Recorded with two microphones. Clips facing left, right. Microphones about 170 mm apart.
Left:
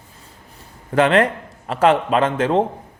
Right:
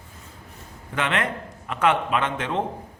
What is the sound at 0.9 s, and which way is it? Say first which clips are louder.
A man's voice: left 10 dB; 35° left (ahead or behind).